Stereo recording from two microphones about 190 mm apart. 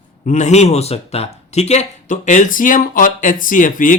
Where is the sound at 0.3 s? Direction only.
40° left (ahead or behind).